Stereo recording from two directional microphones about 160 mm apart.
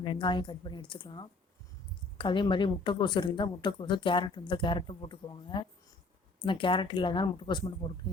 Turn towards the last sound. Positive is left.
turn(degrees=30)  # may be behind; listen again after turning